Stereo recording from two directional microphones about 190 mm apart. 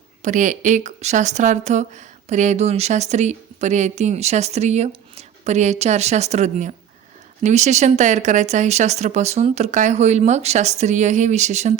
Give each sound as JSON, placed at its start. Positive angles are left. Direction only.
{"t": 0.2, "sound": "speech", "side_deg": -40}